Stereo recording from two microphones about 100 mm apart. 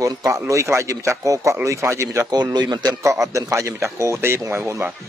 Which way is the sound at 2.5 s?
45° right (ahead or behind).